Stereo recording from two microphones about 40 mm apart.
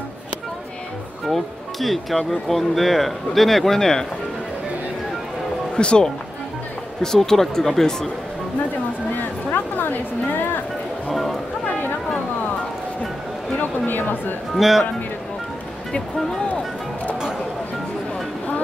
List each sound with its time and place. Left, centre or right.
1.2 s speech: centre
5.8 s speech: left; by 7.8 s centre
9.5 s a woman's voice: left
11.1 s speech: centre
13.6 s speech: left
14.5 s speech: centre
16.4 s music: left